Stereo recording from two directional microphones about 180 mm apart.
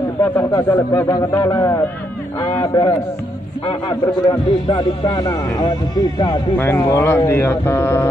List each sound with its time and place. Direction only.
0.2 s speech: 20° left (ahead or behind)
6.5 s speech: 10° left (ahead or behind)